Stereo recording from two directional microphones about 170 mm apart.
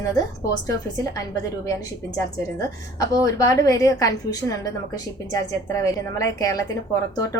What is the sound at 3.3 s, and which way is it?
A woman's voice, 20° left (ahead or behind).